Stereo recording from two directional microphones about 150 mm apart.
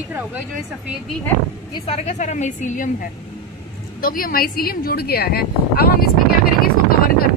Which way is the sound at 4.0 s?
75° left (ahead or behind).